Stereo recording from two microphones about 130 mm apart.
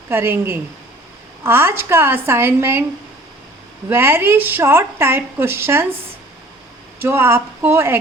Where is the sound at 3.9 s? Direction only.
20° right (ahead or behind).